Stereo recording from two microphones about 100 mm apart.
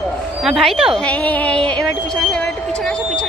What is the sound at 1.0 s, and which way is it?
Speech, 15° left (ahead or behind).